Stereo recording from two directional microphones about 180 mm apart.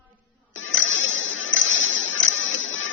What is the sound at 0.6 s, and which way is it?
Music, 90° left.